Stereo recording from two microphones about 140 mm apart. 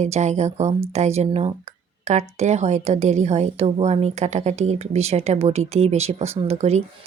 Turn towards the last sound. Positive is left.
turn(degrees=-50)  # may be behind; listen again after turning